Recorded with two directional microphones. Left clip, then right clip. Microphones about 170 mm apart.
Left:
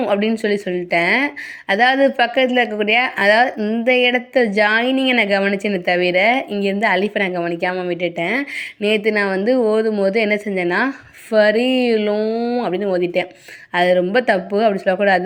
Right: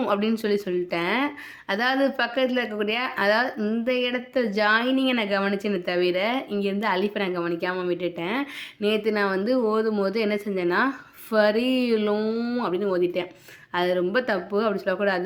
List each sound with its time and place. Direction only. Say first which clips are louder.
0.0 s speech: left 6 dB; 15° left (ahead or behind)